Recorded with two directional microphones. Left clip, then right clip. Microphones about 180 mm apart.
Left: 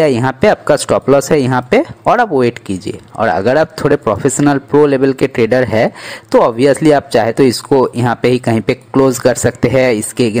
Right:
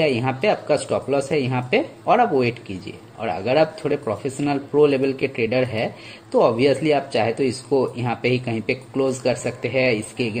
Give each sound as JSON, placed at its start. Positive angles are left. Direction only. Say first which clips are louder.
{"t": 0.4, "sound": "speech", "louder": "left 10 dB", "side_deg": 35}